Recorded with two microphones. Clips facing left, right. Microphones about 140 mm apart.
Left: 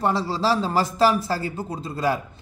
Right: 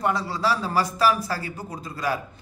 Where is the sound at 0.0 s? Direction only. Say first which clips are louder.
Left 2 dB; 30° left (ahead or behind).